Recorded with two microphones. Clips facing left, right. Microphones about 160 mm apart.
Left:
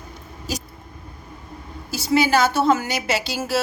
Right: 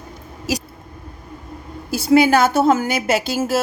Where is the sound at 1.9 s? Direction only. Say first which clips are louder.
Right 5 dB; 55° right (ahead or behind).